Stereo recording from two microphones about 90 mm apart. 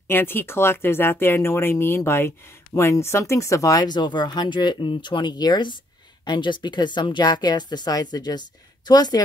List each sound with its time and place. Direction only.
0.1 s a woman's voice: 25° left (ahead or behind); by 9.2 s 50° left (ahead or behind)